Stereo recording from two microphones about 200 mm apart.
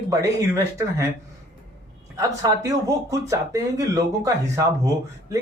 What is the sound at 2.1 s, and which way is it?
Speech, 15° right (ahead or behind).